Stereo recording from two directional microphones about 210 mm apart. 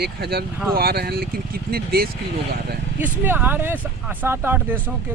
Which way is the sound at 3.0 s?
10° right (ahead or behind).